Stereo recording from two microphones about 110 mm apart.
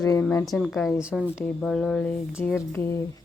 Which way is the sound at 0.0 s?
30° left (ahead or behind).